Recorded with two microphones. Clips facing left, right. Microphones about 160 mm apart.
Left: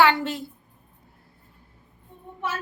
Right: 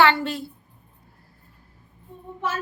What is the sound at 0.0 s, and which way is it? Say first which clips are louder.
Speech: even; 15° left (ahead or behind).